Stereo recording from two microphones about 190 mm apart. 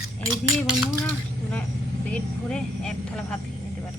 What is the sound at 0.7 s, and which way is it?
Speech, centre (ahead or behind).